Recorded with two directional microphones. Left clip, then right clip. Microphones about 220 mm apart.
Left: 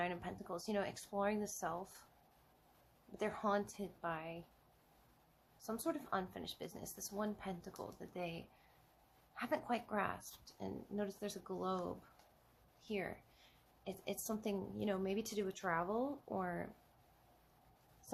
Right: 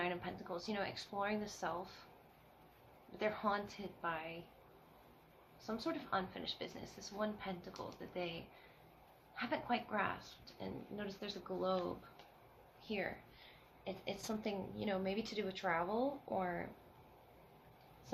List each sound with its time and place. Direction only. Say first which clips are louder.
0.0 s a woman's voice: right 1 dB; 50° left (ahead or behind)
3.2 s a woman's voice: even; 50° left (ahead or behind)
5.6 s a woman's voice: even; 50° left (ahead or behind)
12.8 s a woman's voice: right 2 dB; 50° left (ahead or behind)